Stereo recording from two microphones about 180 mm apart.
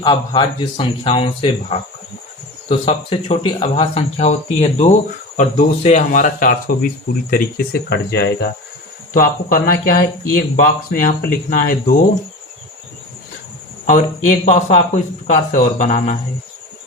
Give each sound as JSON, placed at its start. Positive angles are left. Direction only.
{"t": 0.0, "sound": "speech", "side_deg": 25}
{"t": 9.1, "sound": "speech", "side_deg": 50}
{"t": 13.8, "sound": "speech", "side_deg": 45}